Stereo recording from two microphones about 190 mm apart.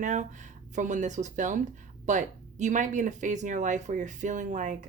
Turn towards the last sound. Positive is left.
turn(degrees=-40)  # may be behind; listen again after turning